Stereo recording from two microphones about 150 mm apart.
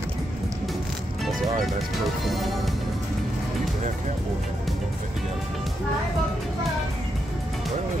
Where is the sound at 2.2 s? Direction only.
Centre (ahead or behind).